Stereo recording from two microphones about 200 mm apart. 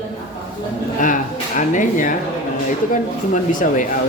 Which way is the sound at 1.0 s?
40° left (ahead or behind).